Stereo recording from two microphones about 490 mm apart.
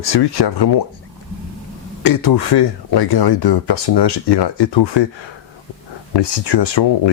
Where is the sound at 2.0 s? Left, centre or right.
Left.